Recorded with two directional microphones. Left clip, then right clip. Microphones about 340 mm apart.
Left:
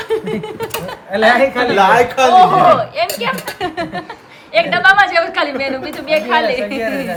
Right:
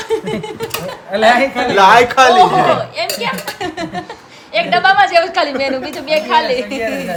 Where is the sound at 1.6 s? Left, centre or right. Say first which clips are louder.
Right 6 dB; centre.